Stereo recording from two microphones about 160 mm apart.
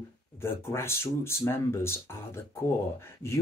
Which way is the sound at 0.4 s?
15° left (ahead or behind).